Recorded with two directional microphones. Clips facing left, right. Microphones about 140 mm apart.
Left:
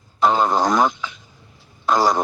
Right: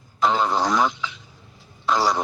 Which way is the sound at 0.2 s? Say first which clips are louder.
Left 3 dB; 45° left (ahead or behind).